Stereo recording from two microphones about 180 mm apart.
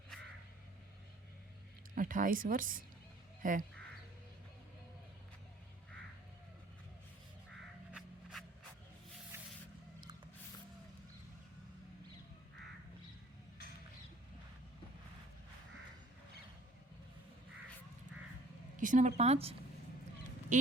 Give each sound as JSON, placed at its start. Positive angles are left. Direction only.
{"t": 2.0, "sound": "speech", "side_deg": -50}
{"t": 7.9, "sound": "a sound", "side_deg": 0}
{"t": 18.8, "sound": "a woman's voice", "side_deg": -45}
{"t": 20.5, "sound": "speech", "side_deg": -45}